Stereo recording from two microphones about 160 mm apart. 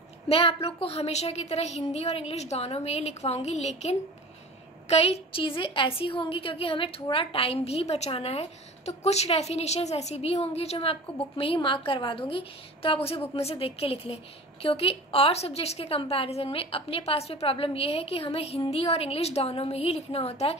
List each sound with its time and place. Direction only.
0.3 s a woman's voice: 35° left (ahead or behind)